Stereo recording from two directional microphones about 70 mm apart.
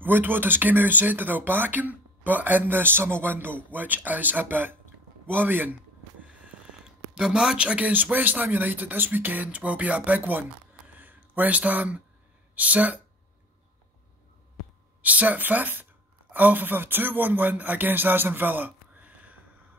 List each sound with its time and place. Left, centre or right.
0.0 s speech: right
7.2 s speech: centre
10.9 s a sound: right
12.5 s speech: right
15.0 s speech: right